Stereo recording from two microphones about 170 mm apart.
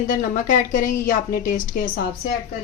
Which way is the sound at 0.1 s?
50° left (ahead or behind).